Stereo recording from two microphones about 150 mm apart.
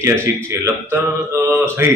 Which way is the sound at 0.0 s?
15° right (ahead or behind).